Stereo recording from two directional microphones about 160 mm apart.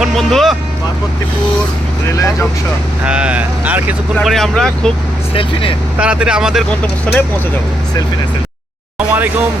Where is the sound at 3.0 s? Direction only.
5° right (ahead or behind).